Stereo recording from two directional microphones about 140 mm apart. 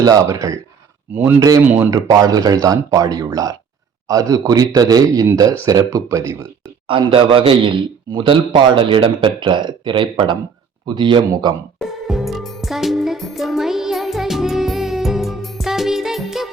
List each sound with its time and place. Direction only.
0.0 s speech: 25° right (ahead or behind)
1.1 s speech: 15° right (ahead or behind)
1.4 s speech: 25° right (ahead or behind)
6.8 s a man's voice: 35° right (ahead or behind)
12.0 s music: centre (ahead or behind)